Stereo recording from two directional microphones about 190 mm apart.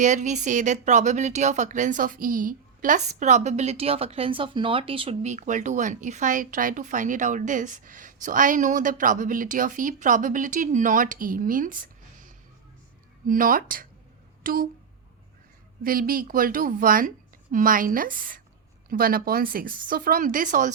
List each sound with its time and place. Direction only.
0.0 s speech: 40° right (ahead or behind)
13.2 s speech: 45° right (ahead or behind)
14.4 s a sound: 50° right (ahead or behind)
15.8 s speech: 50° right (ahead or behind)